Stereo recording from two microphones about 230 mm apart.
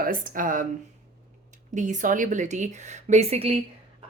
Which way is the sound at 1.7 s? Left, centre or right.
Right.